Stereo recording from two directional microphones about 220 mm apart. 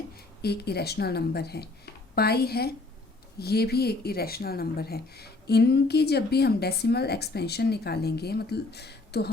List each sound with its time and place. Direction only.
0.4 s speech: 45° left (ahead or behind)